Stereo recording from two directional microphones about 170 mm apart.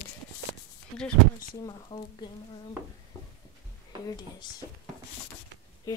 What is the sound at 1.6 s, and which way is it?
Speech, 25° left (ahead or behind).